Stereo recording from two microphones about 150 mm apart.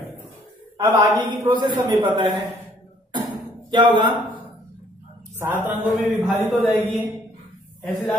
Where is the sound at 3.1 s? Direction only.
30° right (ahead or behind).